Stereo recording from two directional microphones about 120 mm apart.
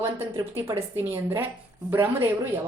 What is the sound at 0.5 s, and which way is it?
A woman's voice, 25° right (ahead or behind).